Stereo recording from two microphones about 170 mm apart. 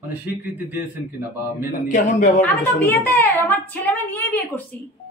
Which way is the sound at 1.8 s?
45° left (ahead or behind).